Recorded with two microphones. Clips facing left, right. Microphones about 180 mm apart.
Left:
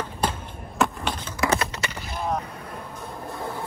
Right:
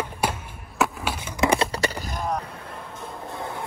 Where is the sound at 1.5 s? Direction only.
35° right (ahead or behind).